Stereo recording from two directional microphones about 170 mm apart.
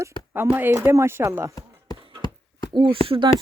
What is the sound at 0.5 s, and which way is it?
Speech, 15° right (ahead or behind).